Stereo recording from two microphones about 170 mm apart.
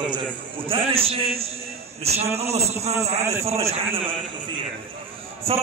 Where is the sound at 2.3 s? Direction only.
40° right (ahead or behind).